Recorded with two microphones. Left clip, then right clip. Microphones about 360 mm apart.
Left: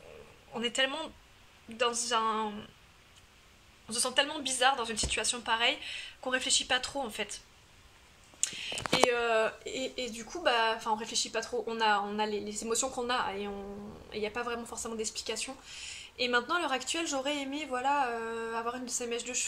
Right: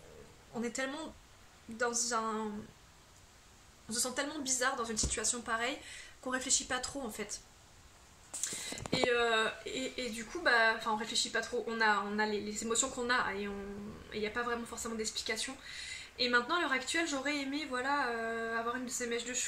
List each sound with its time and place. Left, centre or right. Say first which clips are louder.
0.6 s speech: left 7 dB; centre
3.9 s speech: left 7 dB; centre
8.7 s a sound: left 6 dB; left
9.1 s speech: left 2 dB; centre